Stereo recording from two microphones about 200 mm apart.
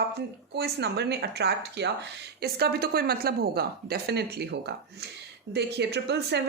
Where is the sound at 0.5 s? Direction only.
55° right (ahead or behind).